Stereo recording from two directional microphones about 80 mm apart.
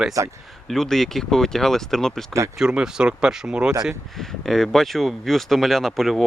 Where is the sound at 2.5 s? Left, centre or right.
Centre.